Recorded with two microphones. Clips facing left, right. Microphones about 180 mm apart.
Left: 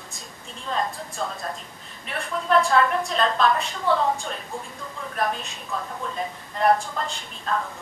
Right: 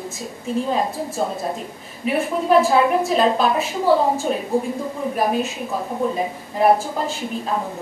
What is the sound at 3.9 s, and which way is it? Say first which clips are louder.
Speech: right 5 dB; 30° right (ahead or behind).